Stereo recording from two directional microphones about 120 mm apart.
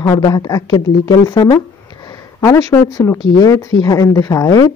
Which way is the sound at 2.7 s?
20° left (ahead or behind).